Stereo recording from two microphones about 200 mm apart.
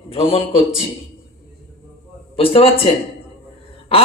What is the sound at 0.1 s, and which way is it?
Speech, 30° left (ahead or behind).